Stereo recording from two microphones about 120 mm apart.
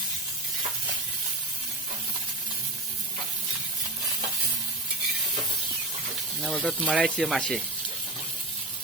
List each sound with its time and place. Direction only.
6.4 s speech: centre (ahead or behind)